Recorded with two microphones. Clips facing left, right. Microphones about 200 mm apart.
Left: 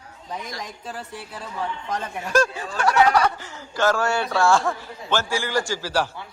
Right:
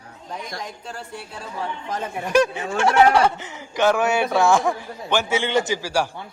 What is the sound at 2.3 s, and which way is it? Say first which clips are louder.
Speech: right 3 dB; 20° right (ahead or behind).